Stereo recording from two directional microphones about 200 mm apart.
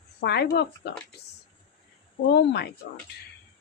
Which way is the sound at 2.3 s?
55° left (ahead or behind).